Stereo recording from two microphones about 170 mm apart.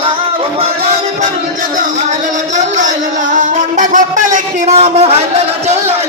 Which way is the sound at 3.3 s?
50° right (ahead or behind).